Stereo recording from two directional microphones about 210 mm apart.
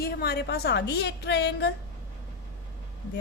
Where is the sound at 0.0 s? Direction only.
50° left (ahead or behind).